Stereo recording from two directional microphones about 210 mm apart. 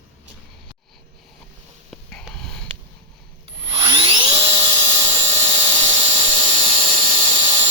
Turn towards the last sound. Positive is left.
turn(degrees=-25)  # may be behind; listen again after turning